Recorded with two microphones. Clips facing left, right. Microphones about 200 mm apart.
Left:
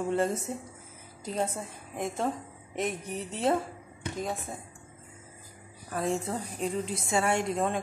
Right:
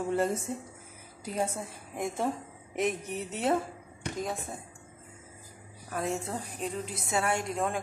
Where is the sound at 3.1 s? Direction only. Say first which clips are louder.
Left 1 dB; 30° left (ahead or behind).